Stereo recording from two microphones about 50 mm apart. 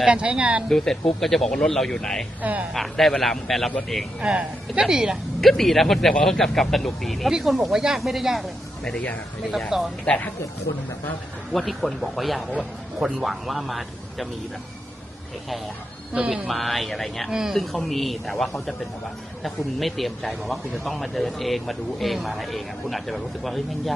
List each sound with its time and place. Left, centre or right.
0.0 s speech: centre
0.7 s speech: centre
2.4 s a woman's voice: right
2.7 s a man's voice: centre
4.2 s a woman's voice: right
5.4 s a man's voice: centre
9.6 s a woman's voice: centre
11.5 s a man's voice: centre
16.5 s a man's voice: centre